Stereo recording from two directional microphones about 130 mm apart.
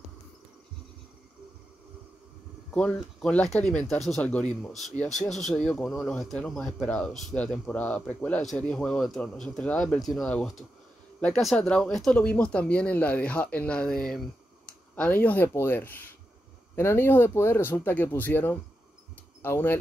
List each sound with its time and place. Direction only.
2.7 s speech: 10° left (ahead or behind)